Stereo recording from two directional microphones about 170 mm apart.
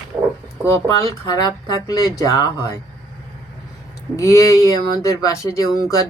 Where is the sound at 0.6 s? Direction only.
20° left (ahead or behind).